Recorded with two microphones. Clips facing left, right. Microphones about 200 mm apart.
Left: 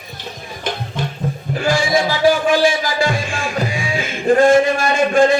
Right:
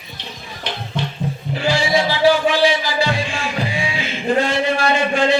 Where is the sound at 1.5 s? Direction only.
50° left (ahead or behind).